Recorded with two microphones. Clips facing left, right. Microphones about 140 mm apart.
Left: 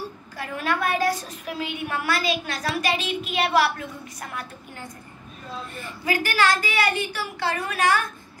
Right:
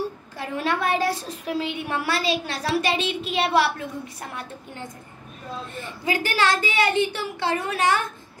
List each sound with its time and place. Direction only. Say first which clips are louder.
0.4 s a woman's voice: right 1 dB; 25° right (ahead or behind)